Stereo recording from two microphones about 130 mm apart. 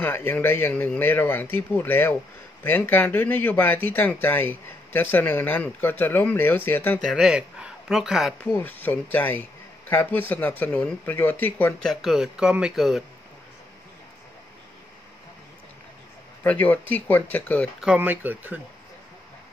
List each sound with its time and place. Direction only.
0.0 s speech: 15° left (ahead or behind)
7.0 s speech: centre (ahead or behind)
8.5 s speech: 15° left (ahead or behind)
11.8 s speech: centre (ahead or behind)
16.4 s speech: 10° left (ahead or behind)
17.8 s speech: 15° right (ahead or behind)